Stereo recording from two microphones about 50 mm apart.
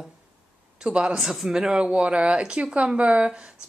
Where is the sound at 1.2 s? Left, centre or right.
Centre.